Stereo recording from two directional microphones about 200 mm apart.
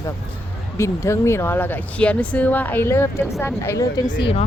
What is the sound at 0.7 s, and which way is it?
Speech, 15° left (ahead or behind).